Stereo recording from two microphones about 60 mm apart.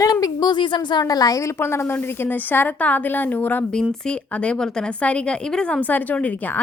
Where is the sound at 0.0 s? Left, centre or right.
Left.